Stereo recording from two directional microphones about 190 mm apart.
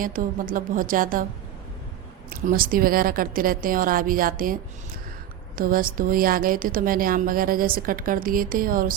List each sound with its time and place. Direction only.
0.0 s a woman's voice: 45° right (ahead or behind)
2.3 s a woman's voice: 50° right (ahead or behind)
5.5 s a woman's voice: 50° right (ahead or behind)